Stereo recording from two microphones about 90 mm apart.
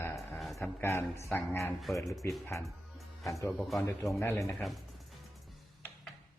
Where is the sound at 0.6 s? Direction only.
30° left (ahead or behind).